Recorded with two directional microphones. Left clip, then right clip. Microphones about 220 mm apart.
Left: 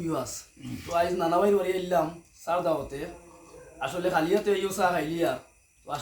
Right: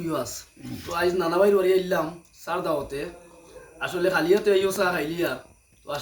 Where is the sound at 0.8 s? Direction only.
10° left (ahead or behind).